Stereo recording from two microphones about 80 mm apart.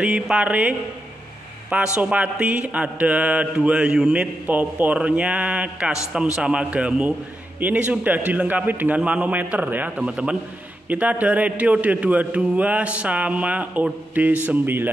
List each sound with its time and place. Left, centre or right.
0.0 s mantra: centre
7.6 s a man's voice: centre
9.9 s mantra: centre
14.1 s a man's voice: centre